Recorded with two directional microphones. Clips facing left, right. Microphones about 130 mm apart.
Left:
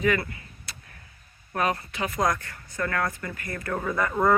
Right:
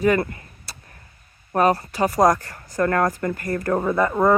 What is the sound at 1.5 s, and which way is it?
Speech, 35° right (ahead or behind).